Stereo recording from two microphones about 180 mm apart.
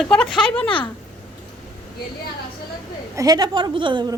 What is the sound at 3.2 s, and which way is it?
Speech, 20° right (ahead or behind).